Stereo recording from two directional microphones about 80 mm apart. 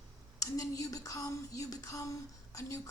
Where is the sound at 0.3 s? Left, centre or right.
Left.